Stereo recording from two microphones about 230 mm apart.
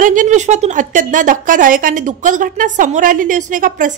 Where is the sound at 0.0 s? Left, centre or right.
Right.